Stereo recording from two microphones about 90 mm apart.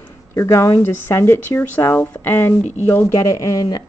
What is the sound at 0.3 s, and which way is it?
Speech, 35° left (ahead or behind).